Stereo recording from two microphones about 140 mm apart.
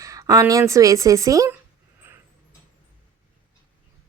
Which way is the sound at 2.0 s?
15° right (ahead or behind).